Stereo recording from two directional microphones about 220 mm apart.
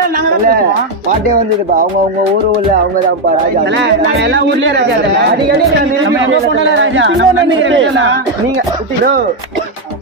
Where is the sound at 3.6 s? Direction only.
50° right (ahead or behind).